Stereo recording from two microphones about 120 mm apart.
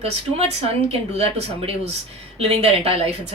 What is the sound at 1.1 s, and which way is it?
A woman's voice, 60° right (ahead or behind).